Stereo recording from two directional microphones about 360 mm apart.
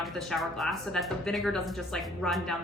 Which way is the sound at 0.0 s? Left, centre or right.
Centre.